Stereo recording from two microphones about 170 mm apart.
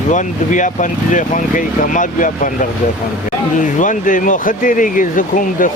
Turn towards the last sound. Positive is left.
turn(degrees=50)  # may be behind; listen again after turning